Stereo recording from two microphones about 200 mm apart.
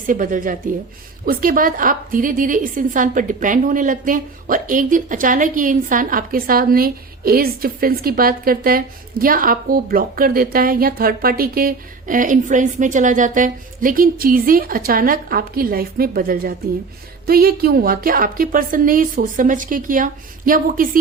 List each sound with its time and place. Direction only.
0.1 s a woman's voice: 40° right (ahead or behind)